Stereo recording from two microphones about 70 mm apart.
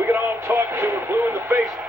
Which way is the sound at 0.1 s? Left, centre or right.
Right.